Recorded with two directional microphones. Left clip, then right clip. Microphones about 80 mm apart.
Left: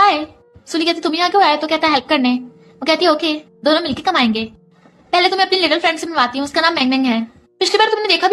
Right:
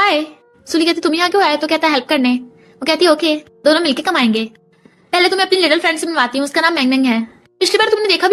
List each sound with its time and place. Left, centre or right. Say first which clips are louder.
0.0 s music: left 1 dB; right
0.7 s a woman's voice: right 3 dB; right